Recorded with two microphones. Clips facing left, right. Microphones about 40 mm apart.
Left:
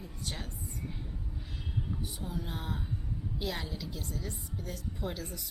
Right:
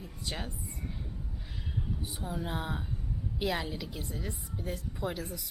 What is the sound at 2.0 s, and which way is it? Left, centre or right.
A woman's voice, right.